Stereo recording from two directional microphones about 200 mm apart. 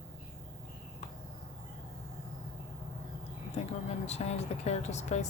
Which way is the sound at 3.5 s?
35° left (ahead or behind).